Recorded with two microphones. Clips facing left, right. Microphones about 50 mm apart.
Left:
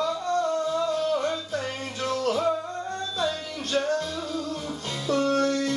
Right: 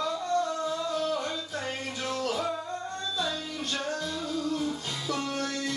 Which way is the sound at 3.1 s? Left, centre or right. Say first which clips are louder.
Left 4 dB; left.